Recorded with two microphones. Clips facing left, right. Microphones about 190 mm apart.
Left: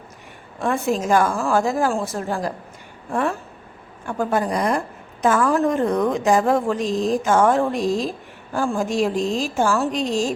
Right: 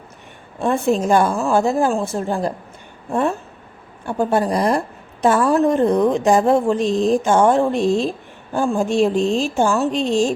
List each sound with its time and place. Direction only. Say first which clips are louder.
0.6 s a woman's voice: right 4 dB; 30° right (ahead or behind)